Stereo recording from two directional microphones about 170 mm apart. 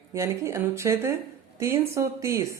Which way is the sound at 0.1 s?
15° right (ahead or behind).